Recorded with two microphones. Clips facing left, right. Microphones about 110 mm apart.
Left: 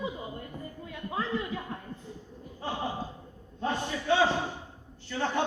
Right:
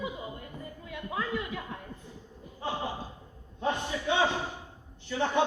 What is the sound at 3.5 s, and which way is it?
Speech, 20° right (ahead or behind).